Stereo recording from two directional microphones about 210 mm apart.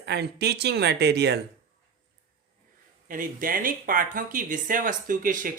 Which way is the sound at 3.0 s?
40° right (ahead or behind).